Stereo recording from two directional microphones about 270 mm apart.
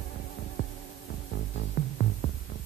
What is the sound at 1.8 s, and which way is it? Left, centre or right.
Music, left.